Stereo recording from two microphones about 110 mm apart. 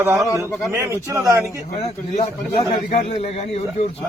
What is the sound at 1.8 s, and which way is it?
A man's voice, 65° left (ahead or behind).